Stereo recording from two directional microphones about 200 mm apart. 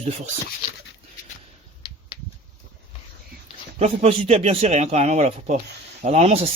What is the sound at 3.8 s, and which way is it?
Speech, 30° right (ahead or behind).